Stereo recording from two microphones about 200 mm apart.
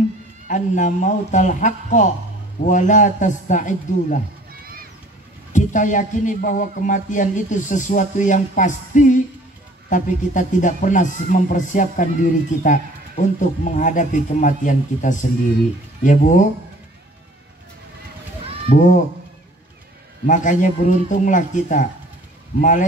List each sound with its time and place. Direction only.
0.5 s a man's voice: 40° left (ahead or behind)
5.5 s a man's voice: 40° left (ahead or behind)
18.7 s a man's voice: 40° left (ahead or behind)
20.2 s a man's voice: 40° left (ahead or behind)